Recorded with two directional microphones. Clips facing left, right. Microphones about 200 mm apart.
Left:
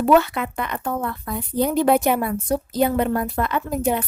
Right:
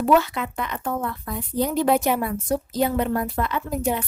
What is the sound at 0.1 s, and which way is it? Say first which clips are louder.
Speech: left 3 dB; 60° left (ahead or behind).